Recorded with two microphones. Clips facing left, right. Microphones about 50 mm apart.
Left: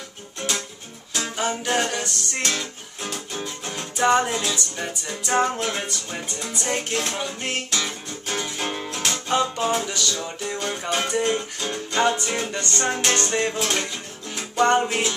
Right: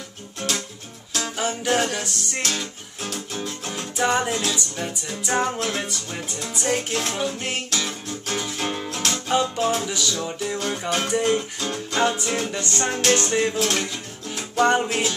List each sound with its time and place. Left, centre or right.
0.4 s music: centre
9.8 s music: centre